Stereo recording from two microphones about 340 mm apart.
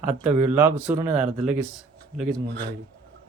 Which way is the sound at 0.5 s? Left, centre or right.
Centre.